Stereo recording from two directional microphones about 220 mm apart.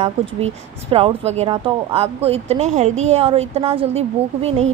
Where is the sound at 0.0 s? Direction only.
25° right (ahead or behind).